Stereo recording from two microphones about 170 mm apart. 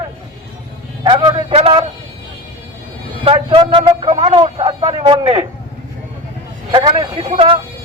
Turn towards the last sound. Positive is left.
turn(degrees=-30)  # may be behind; listen again after turning